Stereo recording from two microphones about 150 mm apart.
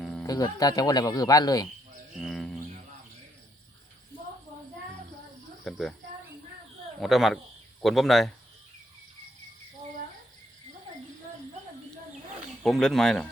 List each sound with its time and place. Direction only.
0.0 s music: 5° left (ahead or behind)
0.3 s speech: 25° left (ahead or behind)
2.1 s cricket: centre (ahead or behind)
5.6 s speech: centre (ahead or behind)
7.0 s speech: centre (ahead or behind)
12.6 s speech: centre (ahead or behind)